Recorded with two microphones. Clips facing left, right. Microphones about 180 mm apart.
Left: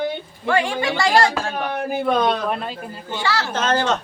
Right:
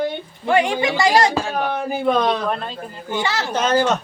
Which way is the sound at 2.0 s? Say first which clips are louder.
Right 1 dB; 5° left (ahead or behind).